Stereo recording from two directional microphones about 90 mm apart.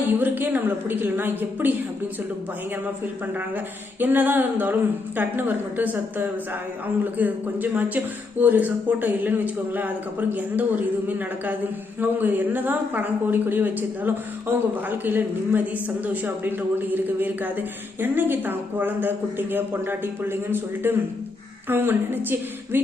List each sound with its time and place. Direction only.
0.1 s a man's voice: 20° right (ahead or behind)
4.0 s a man's voice: 20° right (ahead or behind)
11.9 s a man's voice: 20° right (ahead or behind)